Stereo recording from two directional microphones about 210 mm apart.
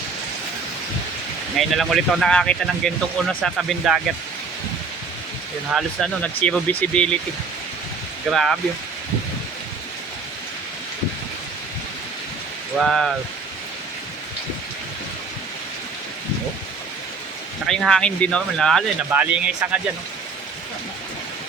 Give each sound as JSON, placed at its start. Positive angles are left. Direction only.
{"t": 1.5, "sound": "speech", "side_deg": 0}
{"t": 5.7, "sound": "speech", "side_deg": 5}
{"t": 8.3, "sound": "speech", "side_deg": 0}
{"t": 12.8, "sound": "speech", "side_deg": 0}
{"t": 17.7, "sound": "speech", "side_deg": 0}